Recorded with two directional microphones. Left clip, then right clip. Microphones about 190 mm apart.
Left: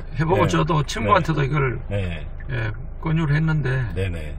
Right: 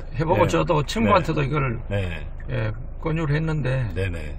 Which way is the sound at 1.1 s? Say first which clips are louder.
Left 2 dB; 55° right (ahead or behind).